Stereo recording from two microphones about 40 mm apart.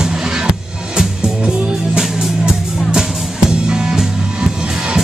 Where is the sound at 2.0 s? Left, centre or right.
Centre.